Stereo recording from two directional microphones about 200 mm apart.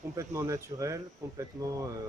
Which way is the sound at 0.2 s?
15° right (ahead or behind).